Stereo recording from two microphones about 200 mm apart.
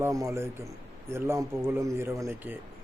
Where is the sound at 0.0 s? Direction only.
15° right (ahead or behind).